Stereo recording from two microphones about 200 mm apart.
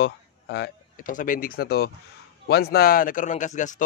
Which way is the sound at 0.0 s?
60° left (ahead or behind).